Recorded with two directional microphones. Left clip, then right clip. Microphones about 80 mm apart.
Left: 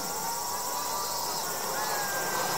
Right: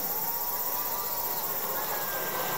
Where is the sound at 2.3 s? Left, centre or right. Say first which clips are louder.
Left 1 dB; centre.